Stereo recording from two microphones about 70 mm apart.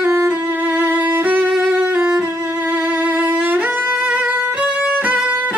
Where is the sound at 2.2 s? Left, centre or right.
Right.